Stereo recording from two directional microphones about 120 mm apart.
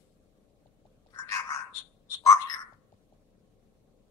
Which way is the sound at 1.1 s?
25° left (ahead or behind).